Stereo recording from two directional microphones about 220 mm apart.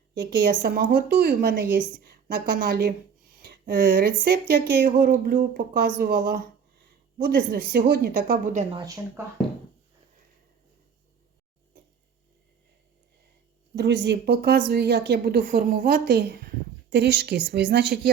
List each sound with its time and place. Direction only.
0.1 s a woman's voice: 45° right (ahead or behind)
2.0 s a sound: 40° right (ahead or behind)
3.3 s speech: 45° right (ahead or behind)
4.9 s a sound: 40° right (ahead or behind)
8.7 s speech: 15° right (ahead or behind)
13.7 s a woman's voice: 55° right (ahead or behind)